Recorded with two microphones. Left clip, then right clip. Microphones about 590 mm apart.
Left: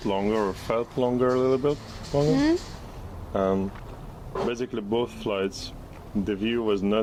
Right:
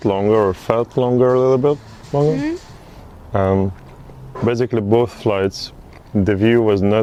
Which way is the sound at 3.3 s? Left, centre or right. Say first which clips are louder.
Right 8 dB; right.